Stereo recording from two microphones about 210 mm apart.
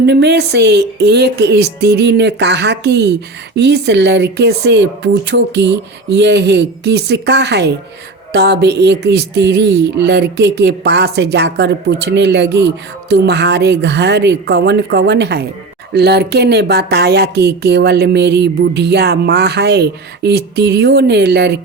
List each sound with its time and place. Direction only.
0.0 s music: 55° right (ahead or behind)